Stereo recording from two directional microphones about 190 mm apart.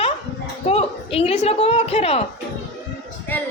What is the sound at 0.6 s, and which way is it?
A woman's voice, 30° left (ahead or behind).